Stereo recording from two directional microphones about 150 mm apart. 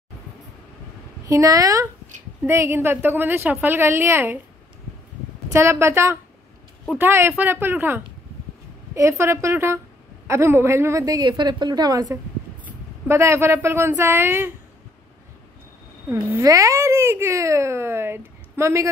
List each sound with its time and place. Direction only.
1.2 s a woman's voice: 25° right (ahead or behind)
5.5 s a woman's voice: 15° right (ahead or behind)
16.1 s speech: 15° right (ahead or behind)